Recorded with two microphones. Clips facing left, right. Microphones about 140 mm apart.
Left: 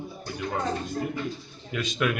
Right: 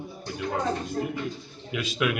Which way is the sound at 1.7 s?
5° right (ahead or behind).